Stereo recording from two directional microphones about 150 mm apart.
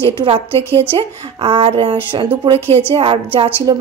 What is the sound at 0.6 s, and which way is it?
Speech, 15° left (ahead or behind).